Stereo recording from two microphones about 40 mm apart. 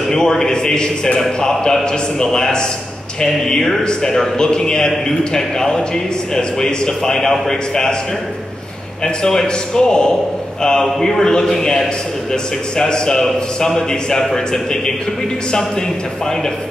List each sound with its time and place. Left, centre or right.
0.1 s a man's voice: centre
9.0 s a man's voice: centre
14.3 s a man's voice: centre